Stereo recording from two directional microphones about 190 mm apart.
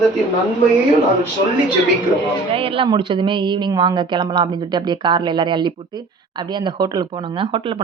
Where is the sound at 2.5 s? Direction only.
30° right (ahead or behind).